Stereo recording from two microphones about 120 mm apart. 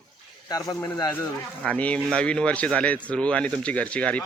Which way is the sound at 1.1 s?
15° left (ahead or behind).